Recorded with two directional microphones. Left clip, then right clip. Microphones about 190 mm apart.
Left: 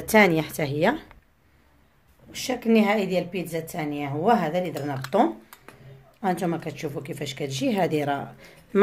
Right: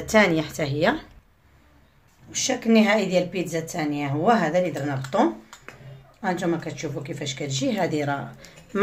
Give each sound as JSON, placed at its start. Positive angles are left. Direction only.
{"t": 0.0, "sound": "speech", "side_deg": 40}
{"t": 2.3, "sound": "a woman's voice", "side_deg": 25}
{"t": 5.0, "sound": "speech", "side_deg": 45}